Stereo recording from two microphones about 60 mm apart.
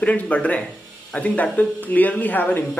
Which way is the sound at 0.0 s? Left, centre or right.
Left.